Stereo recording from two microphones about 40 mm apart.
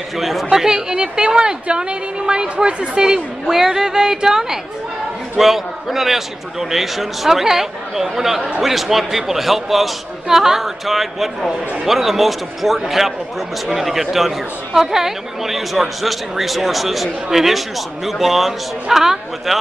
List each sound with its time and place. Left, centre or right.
0.2 s speech: centre
0.5 s a woman's voice: centre